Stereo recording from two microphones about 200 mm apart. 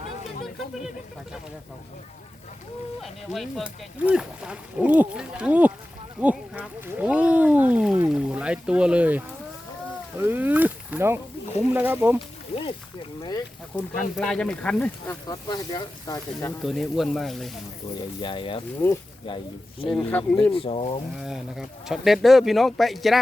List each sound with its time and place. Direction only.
3.0 s speech: centre (ahead or behind)
12.5 s speech: 30° left (ahead or behind)
13.7 s speech: 10° left (ahead or behind)
15.3 s speech: 20° left (ahead or behind)
16.6 s speech: centre (ahead or behind)
18.2 s speech: 25° left (ahead or behind)
18.8 s speech: 10° left (ahead or behind)
19.3 s speech: 25° left (ahead or behind)
19.9 s speech: 5° left (ahead or behind)
20.5 s speech: 30° left (ahead or behind)
21.2 s speech: centre (ahead or behind)